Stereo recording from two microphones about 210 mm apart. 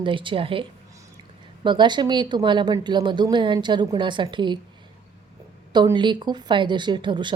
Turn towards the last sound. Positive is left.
turn(degrees=-20)  # may be behind; listen again after turning